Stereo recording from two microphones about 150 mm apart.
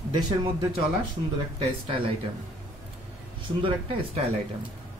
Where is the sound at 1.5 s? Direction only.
35° right (ahead or behind).